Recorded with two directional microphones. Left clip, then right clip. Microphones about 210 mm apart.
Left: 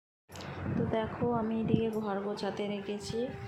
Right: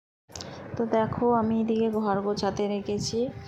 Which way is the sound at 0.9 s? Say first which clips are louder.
Right 10 dB; 25° right (ahead or behind).